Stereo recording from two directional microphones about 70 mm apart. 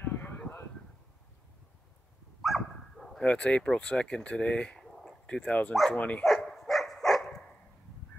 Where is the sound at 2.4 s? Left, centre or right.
Centre.